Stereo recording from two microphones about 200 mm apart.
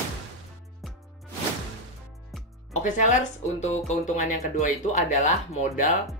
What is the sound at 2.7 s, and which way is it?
Speech, 35° left (ahead or behind).